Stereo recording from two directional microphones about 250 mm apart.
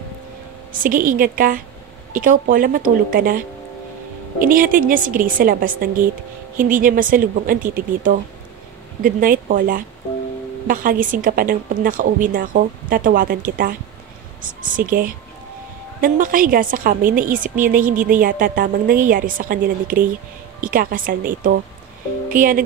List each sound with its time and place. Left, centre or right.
0.8 s a woman's voice: right